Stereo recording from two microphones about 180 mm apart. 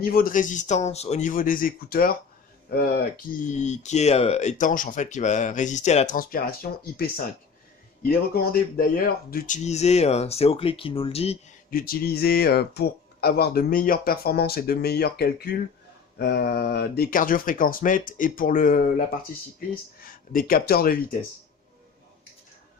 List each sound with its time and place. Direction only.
0.0 s speech: 55° left (ahead or behind)
9.6 s speech: 35° left (ahead or behind)
11.7 s speech: 55° left (ahead or behind)
20.1 s speech: 50° left (ahead or behind)